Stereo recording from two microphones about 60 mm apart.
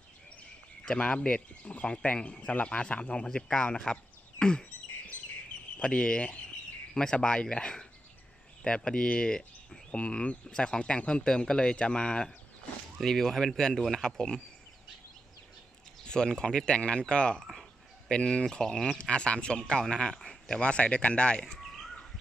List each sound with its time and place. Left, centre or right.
0.8 s speech: centre
5.8 s speech: centre
13.0 s speech: centre
16.1 s speech: centre
17.5 s a sound: centre
18.1 s speech: centre